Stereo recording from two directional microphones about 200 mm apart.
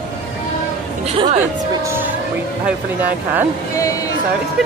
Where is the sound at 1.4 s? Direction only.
10° right (ahead or behind).